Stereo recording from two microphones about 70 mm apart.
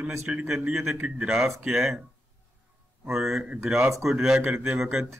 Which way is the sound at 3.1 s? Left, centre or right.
Centre.